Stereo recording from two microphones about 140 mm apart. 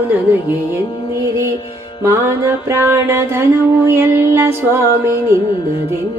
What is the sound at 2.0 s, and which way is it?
Music, 15° right (ahead or behind).